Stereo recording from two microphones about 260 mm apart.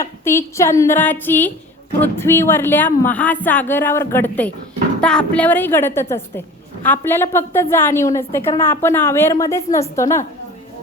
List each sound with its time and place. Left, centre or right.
0.0 s a woman's voice: centre